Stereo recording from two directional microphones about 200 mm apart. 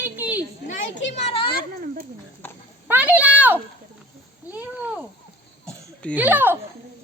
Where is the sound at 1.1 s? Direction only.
30° left (ahead or behind).